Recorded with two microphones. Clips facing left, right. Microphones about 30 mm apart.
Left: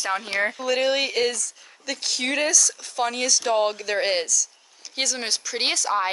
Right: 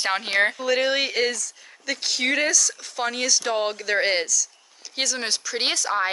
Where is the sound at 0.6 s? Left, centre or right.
Centre.